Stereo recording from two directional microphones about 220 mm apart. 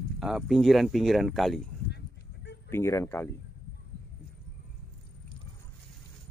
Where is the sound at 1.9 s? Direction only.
50° left (ahead or behind).